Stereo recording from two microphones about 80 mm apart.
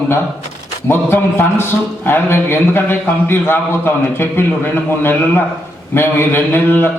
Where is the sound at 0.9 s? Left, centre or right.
Left.